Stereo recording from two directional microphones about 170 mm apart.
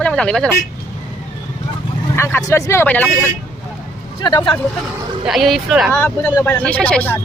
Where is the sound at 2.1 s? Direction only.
15° left (ahead or behind).